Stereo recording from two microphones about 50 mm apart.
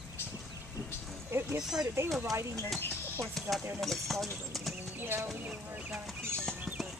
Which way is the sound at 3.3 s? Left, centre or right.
Centre.